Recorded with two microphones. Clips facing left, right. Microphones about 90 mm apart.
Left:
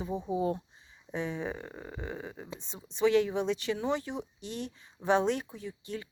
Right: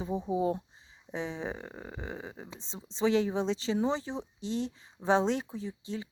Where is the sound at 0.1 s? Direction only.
5° right (ahead or behind).